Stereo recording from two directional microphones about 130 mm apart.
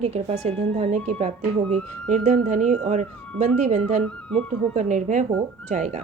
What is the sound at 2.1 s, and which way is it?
Speech, 70° right (ahead or behind).